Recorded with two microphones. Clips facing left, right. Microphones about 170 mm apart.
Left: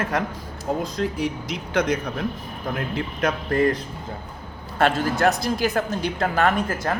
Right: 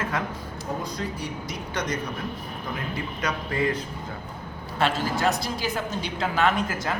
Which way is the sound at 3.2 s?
50° left (ahead or behind).